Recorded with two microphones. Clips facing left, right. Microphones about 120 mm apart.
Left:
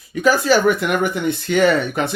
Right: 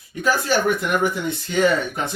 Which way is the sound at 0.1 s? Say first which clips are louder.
Left 5 dB; 90° left.